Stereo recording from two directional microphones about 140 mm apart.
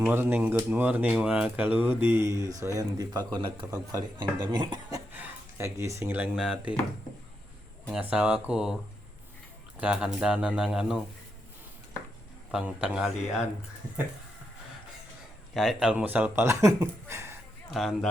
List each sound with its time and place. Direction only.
0.0 s speech: 15° right (ahead or behind)
5.1 s speech: 15° right (ahead or behind)
7.9 s speech: 10° right (ahead or behind)
9.7 s speech: 10° right (ahead or behind)
12.5 s speech: 10° right (ahead or behind)
15.5 s speech: 5° right (ahead or behind)
17.7 s speech: centre (ahead or behind)